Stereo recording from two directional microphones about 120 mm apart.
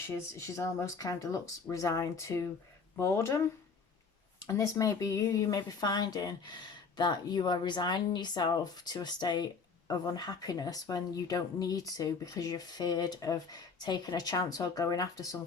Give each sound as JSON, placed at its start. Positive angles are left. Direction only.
{"t": 0.1, "sound": "speech", "side_deg": 25}
{"t": 4.4, "sound": "speech", "side_deg": 25}